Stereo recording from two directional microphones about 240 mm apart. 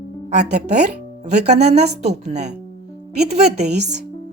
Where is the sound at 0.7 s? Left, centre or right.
Right.